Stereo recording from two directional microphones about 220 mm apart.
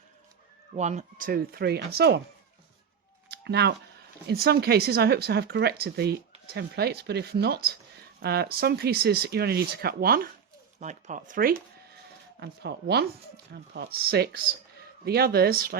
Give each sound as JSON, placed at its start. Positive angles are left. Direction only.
{"t": 0.8, "sound": "speech", "side_deg": -30}
{"t": 3.2, "sound": "a sound", "side_deg": -50}
{"t": 4.3, "sound": "speech", "side_deg": -45}